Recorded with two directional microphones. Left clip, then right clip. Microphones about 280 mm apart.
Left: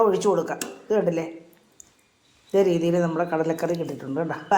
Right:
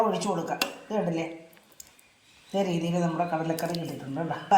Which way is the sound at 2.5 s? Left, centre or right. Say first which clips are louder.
Left 8 dB; centre.